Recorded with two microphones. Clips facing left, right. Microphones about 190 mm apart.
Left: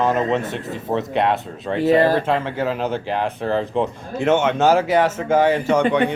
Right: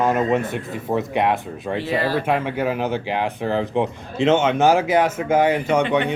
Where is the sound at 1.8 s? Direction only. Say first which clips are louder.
Left 8 dB; 45° left (ahead or behind).